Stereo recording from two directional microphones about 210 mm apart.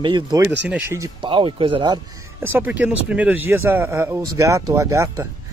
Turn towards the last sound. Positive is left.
turn(degrees=-15)  # may be behind; listen again after turning